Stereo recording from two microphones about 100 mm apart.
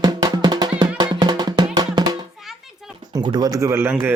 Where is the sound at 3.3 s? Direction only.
40° right (ahead or behind); by 4.1 s 25° right (ahead or behind).